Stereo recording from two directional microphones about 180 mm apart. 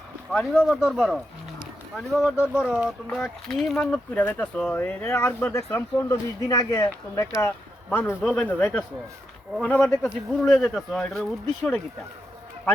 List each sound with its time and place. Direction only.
0.3 s a man's voice: centre (ahead or behind)